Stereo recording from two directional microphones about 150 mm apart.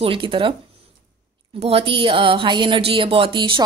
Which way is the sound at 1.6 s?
40° right (ahead or behind).